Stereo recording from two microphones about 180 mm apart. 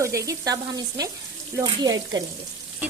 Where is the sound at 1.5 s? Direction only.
20° right (ahead or behind).